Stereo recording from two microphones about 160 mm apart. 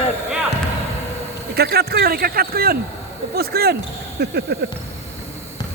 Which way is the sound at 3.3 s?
80° right.